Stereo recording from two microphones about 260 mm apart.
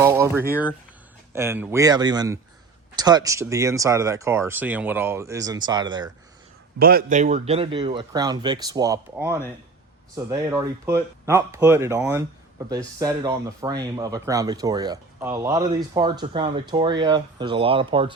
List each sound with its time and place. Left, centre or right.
0.0 s speech: centre
6.7 s speech: right; by 9.4 s centre
10.5 s speech: centre